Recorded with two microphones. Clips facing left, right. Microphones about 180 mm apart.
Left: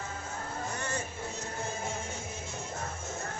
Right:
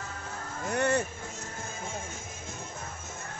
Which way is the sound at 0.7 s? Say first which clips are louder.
Right 13 dB; 65° right (ahead or behind).